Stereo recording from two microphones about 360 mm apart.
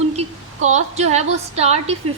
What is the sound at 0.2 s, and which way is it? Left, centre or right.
A woman's voice, centre.